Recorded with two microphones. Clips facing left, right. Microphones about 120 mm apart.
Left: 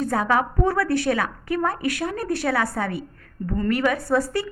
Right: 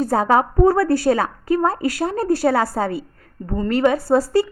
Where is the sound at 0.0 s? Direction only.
35° right (ahead or behind).